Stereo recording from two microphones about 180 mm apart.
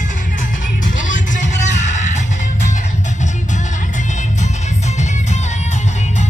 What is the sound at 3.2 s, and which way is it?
Music, 40° left (ahead or behind).